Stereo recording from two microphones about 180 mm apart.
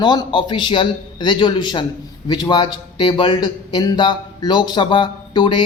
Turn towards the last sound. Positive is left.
turn(degrees=25)  # may be behind; listen again after turning